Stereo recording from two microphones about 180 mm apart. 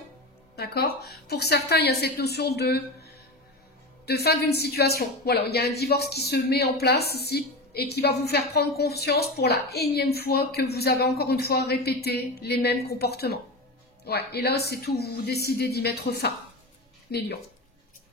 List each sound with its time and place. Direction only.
0.6 s a woman's voice: 60° left (ahead or behind)